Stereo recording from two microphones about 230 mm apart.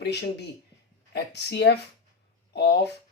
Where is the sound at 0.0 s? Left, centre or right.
Left.